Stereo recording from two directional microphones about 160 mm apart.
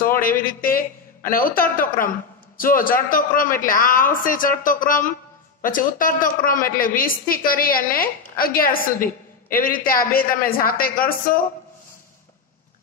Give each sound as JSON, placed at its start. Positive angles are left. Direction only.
{"t": 0.2, "sound": "a woman's voice", "side_deg": 60}